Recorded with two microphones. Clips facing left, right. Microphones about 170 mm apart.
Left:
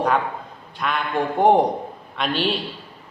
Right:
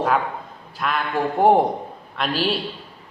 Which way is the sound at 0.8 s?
Centre (ahead or behind).